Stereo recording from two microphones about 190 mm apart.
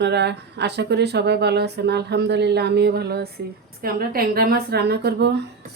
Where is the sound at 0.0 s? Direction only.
65° right (ahead or behind).